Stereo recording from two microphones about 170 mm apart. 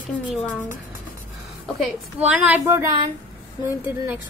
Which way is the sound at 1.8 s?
10° right (ahead or behind).